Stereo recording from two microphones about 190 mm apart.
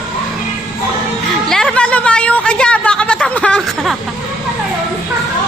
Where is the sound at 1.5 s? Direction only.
5° left (ahead or behind).